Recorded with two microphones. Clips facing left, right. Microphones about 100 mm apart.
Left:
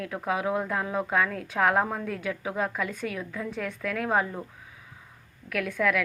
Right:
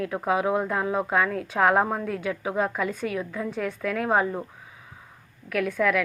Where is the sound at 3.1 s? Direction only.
15° right (ahead or behind).